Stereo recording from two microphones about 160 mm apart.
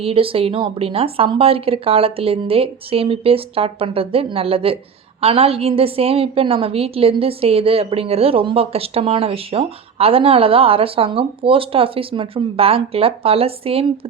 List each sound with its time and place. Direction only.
0.0 s a woman's voice: 35° right (ahead or behind)